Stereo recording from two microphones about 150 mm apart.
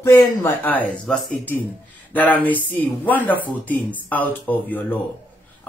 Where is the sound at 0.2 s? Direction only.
20° left (ahead or behind).